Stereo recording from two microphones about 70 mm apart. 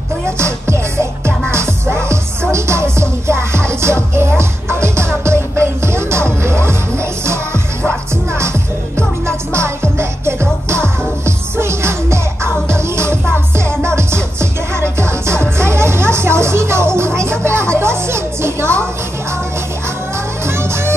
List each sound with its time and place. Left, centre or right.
0.4 s music: right
9.5 s music: right
20.4 s music: right